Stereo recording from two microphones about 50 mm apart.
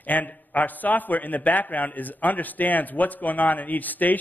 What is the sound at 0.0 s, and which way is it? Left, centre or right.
A man's voice, left.